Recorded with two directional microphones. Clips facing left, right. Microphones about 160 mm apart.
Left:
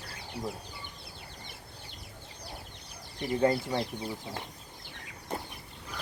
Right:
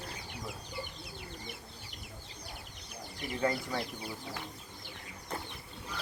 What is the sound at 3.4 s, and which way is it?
Speech, 30° left (ahead or behind).